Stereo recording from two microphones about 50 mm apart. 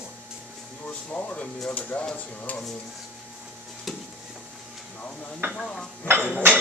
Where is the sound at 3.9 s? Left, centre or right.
Centre.